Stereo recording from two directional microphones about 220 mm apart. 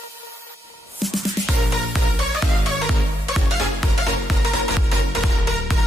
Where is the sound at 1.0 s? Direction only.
Centre (ahead or behind).